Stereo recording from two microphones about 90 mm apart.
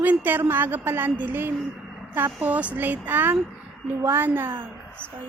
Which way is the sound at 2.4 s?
15° right (ahead or behind).